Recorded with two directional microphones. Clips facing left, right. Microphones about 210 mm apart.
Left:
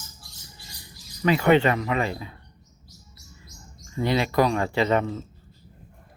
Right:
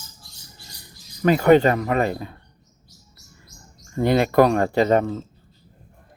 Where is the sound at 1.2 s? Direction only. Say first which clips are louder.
Right 4 dB; 45° right (ahead or behind).